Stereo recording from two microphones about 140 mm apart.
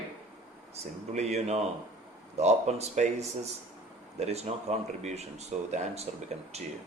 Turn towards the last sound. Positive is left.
turn(degrees=-50)  # may be behind; listen again after turning